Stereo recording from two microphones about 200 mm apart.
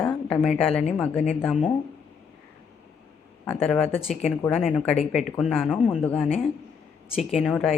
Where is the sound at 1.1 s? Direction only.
35° left (ahead or behind).